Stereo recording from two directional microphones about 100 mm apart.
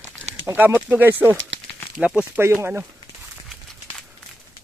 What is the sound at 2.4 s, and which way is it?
Speech, 25° right (ahead or behind).